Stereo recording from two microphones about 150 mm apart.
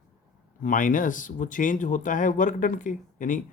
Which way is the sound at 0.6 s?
60° left (ahead or behind).